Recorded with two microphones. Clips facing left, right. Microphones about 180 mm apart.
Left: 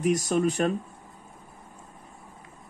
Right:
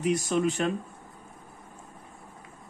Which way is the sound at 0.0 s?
40° left (ahead or behind).